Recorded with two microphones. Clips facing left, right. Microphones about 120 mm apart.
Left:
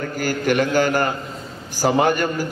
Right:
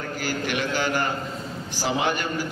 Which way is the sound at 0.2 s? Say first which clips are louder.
Left 8 dB; 45° left (ahead or behind).